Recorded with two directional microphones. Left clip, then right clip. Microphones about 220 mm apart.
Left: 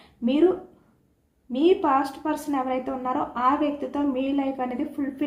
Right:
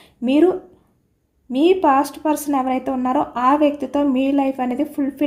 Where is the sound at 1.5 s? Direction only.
50° right (ahead or behind).